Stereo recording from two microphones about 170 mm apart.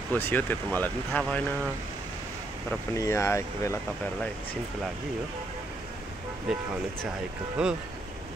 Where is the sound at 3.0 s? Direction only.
15° left (ahead or behind).